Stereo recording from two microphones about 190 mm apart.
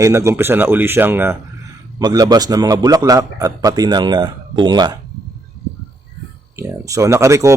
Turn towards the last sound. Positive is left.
turn(degrees=-15)  # may be behind; listen again after turning